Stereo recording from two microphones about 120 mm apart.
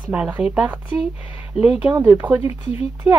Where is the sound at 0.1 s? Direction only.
10° right (ahead or behind).